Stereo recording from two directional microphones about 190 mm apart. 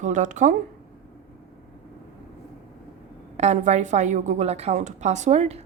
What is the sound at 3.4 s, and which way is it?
Speech, 35° right (ahead or behind).